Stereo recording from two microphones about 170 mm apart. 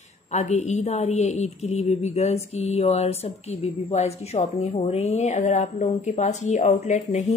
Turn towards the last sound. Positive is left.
turn(degrees=45)  # may be behind; listen again after turning